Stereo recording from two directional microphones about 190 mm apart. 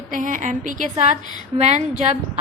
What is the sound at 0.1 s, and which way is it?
A woman's voice, 45° right (ahead or behind).